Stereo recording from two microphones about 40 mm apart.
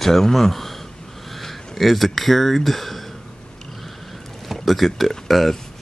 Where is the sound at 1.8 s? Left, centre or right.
Centre.